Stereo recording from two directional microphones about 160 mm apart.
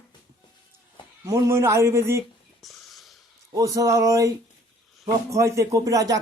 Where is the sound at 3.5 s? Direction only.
20° right (ahead or behind).